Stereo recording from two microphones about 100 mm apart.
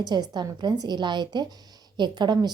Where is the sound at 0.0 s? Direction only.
45° right (ahead or behind).